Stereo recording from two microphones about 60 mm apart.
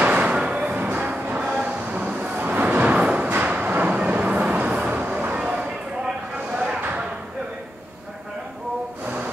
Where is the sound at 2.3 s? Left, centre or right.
Right.